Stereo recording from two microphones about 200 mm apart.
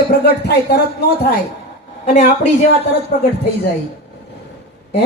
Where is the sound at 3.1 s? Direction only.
50° left (ahead or behind).